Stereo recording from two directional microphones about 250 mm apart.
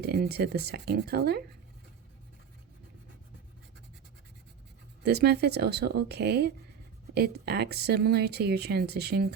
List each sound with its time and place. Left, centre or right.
0.0 s speech: right
5.0 s speech: right